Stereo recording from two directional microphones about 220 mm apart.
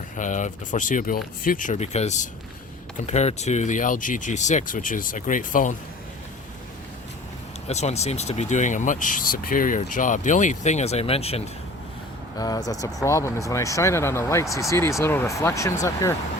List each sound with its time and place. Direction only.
0.2 s speech: 35° left (ahead or behind)
7.7 s speech: 30° left (ahead or behind)
12.4 s speech: 15° left (ahead or behind)